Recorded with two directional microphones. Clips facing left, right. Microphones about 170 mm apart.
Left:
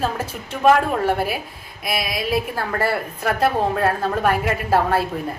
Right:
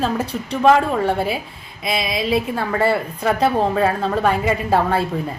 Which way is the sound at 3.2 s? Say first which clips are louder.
Right 2 dB; 5° left (ahead or behind).